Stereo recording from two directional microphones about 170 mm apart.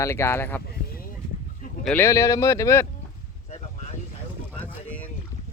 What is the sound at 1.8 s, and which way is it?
Speech, 15° left (ahead or behind).